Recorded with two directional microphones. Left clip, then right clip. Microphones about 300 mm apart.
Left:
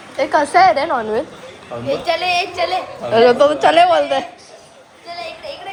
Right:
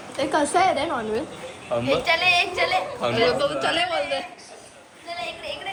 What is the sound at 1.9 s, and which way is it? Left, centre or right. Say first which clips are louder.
A woman's voice: left 3 dB; left.